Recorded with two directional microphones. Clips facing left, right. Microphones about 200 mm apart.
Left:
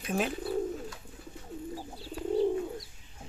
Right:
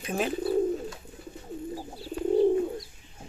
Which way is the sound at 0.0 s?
Centre (ahead or behind).